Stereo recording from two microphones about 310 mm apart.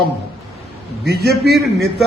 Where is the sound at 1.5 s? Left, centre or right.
Centre.